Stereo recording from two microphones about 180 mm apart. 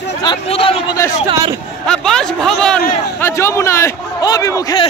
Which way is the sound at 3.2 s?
15° left (ahead or behind).